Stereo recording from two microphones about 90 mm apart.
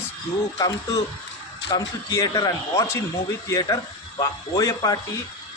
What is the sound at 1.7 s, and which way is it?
A man's voice, 40° left (ahead or behind).